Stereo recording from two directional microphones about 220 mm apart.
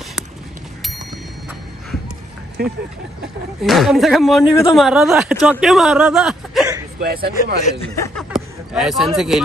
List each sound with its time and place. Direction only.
3.6 s speech: centre (ahead or behind)
7.0 s a man's voice: 45° right (ahead or behind)
7.9 s speech: 15° left (ahead or behind)
8.2 s a sound: centre (ahead or behind)